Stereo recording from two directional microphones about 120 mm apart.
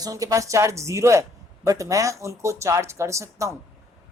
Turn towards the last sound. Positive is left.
turn(degrees=-25)  # may be behind; listen again after turning